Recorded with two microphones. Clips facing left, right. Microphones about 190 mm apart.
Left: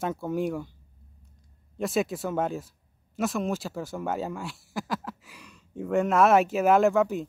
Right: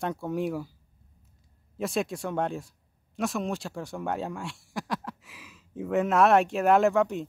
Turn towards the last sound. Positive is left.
turn(degrees=0)  # may be behind; listen again after turning